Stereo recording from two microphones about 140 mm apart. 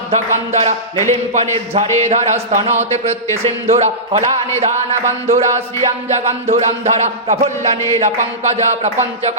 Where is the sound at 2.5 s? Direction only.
55° right (ahead or behind).